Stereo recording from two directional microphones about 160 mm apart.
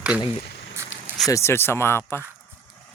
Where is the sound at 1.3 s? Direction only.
15° left (ahead or behind).